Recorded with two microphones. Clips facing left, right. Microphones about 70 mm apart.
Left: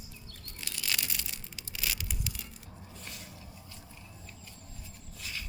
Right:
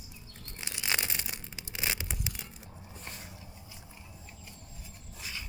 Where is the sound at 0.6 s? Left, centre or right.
Right.